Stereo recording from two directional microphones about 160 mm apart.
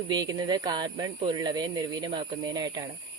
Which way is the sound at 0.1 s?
25° right (ahead or behind).